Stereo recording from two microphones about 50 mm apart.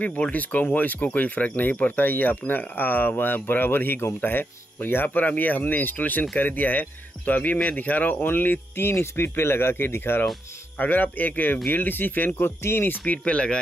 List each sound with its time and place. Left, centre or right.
0.3 s speech: left
8.2 s speech: left
10.8 s speech: left
13.0 s speech: left